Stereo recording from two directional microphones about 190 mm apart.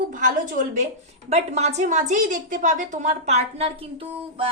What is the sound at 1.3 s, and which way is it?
A woman's voice, 35° right (ahead or behind).